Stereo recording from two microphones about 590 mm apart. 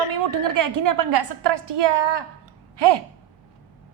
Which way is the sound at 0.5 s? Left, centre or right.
Right.